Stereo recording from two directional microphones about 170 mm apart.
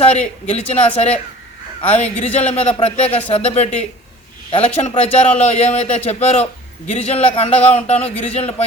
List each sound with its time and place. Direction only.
0.0 s a man's voice: 40° left (ahead or behind)